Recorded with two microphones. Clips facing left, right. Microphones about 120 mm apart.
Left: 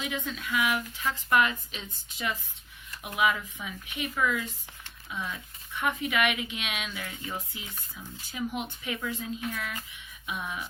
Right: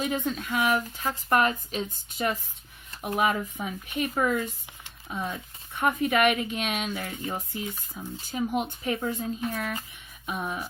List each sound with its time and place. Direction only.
0.0 s speech: 45° right (ahead or behind)